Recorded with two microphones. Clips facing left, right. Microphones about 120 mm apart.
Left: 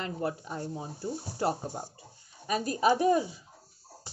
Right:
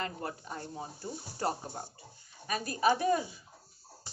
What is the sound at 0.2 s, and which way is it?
A woman's voice, 10° left (ahead or behind).